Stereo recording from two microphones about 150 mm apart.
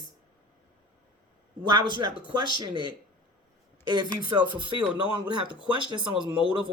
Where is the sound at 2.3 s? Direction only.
30° right (ahead or behind).